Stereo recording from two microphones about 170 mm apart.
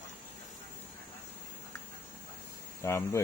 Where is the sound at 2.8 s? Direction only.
15° left (ahead or behind).